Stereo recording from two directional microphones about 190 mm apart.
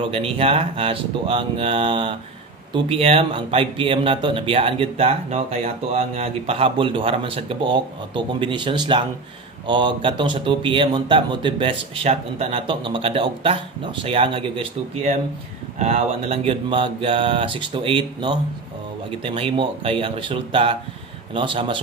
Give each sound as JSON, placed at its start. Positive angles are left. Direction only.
{"t": 0.0, "sound": "speech", "side_deg": -30}